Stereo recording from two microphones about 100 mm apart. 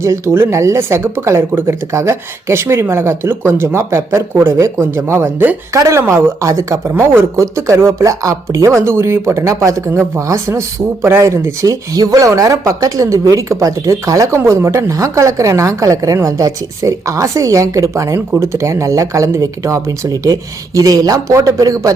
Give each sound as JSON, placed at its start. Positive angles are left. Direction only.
{"t": 0.0, "sound": "speech", "side_deg": -30}